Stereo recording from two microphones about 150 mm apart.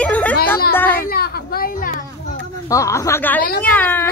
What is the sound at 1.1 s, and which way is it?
Speech, 90° left.